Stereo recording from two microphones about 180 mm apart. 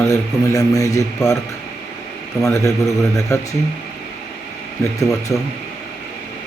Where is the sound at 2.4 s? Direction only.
15° left (ahead or behind).